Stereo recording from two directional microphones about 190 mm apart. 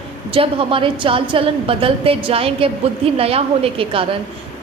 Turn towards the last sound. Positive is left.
turn(degrees=-30)  # may be behind; listen again after turning